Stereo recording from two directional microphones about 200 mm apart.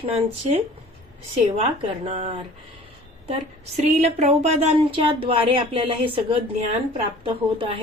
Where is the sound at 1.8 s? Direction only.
30° right (ahead or behind).